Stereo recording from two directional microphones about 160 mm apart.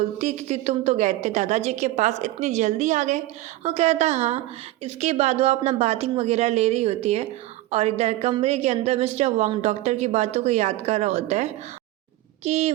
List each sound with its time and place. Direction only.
0.2 s a woman's voice: 45° right (ahead or behind)